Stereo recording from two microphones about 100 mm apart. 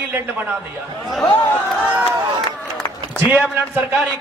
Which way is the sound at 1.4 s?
15° left (ahead or behind).